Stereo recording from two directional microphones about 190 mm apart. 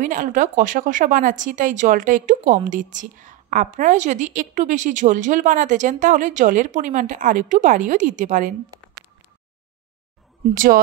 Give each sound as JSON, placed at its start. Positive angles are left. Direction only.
{"t": 0.0, "sound": "speech", "side_deg": -45}
{"t": 10.5, "sound": "a woman's voice", "side_deg": -45}